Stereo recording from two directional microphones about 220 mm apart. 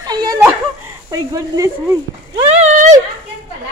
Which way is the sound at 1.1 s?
15° right (ahead or behind).